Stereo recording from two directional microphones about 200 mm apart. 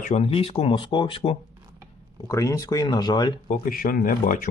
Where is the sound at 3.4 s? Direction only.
40° left (ahead or behind).